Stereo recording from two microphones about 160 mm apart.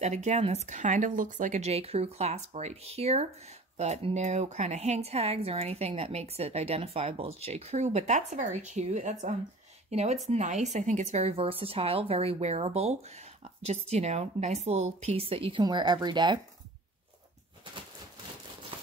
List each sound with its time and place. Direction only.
0.0 s a woman's voice: 45° right (ahead or behind); by 16.3 s 30° right (ahead or behind)